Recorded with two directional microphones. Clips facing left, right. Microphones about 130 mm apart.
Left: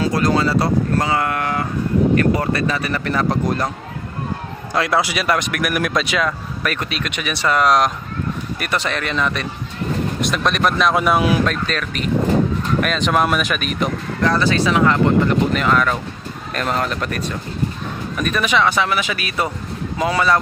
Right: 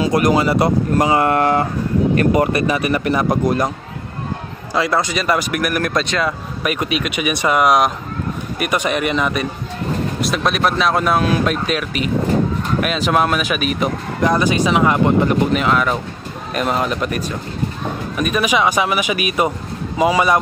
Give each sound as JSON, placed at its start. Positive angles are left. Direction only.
{"t": 0.0, "sound": "speech", "side_deg": -15}
{"t": 2.1, "sound": "speech", "side_deg": -20}
{"t": 4.7, "sound": "speech", "side_deg": 0}
{"t": 6.2, "sound": "speech", "side_deg": -10}
{"t": 11.4, "sound": "speech", "side_deg": -10}
{"t": 14.2, "sound": "speech", "side_deg": -15}